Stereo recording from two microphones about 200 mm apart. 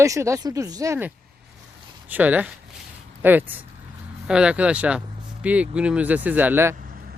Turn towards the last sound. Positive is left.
turn(degrees=-10)  # may be behind; listen again after turning